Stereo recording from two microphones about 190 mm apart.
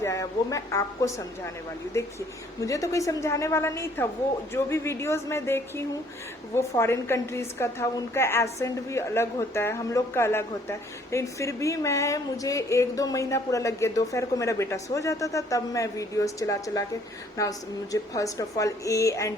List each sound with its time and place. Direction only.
0.0 s a woman's voice: 15° left (ahead or behind)